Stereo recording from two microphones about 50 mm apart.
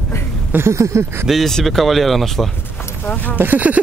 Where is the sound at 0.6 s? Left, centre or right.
Right.